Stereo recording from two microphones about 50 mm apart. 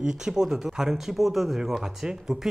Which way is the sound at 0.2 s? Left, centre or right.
Centre.